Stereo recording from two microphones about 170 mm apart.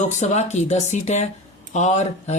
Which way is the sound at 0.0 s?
45° left (ahead or behind).